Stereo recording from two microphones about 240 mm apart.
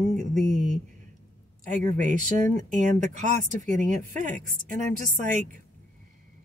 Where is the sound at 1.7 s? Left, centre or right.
Right.